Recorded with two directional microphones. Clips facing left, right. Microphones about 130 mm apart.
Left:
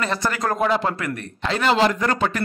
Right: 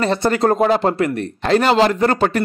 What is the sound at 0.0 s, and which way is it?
Speech, 30° right (ahead or behind).